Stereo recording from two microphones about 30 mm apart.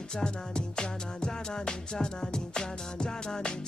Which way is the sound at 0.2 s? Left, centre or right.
Left.